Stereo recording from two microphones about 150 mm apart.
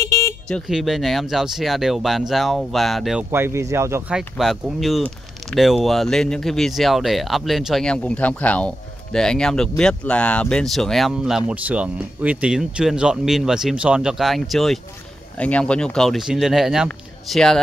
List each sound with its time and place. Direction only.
0.5 s speech: centre (ahead or behind)
3.3 s speech: 15° right (ahead or behind)
4.4 s speech: centre (ahead or behind)